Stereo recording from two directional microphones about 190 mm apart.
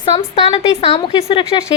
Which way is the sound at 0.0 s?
30° left (ahead or behind).